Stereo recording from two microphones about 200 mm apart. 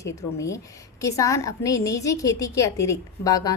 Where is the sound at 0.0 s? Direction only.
15° left (ahead or behind).